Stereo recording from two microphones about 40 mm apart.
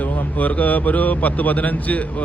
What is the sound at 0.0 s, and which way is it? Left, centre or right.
Speech, left.